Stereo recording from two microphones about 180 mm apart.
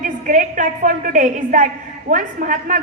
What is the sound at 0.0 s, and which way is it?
A woman's voice, 45° right (ahead or behind).